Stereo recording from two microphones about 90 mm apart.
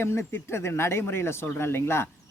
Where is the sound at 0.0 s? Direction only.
30° left (ahead or behind).